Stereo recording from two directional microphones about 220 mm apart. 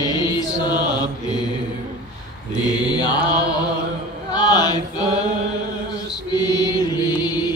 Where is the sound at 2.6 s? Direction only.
20° left (ahead or behind).